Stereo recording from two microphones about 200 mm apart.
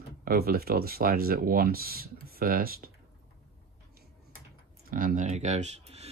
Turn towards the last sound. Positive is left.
turn(degrees=-30)  # may be behind; listen again after turning